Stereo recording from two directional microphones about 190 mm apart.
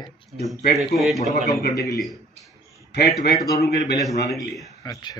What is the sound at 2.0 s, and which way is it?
A man's voice, centre (ahead or behind).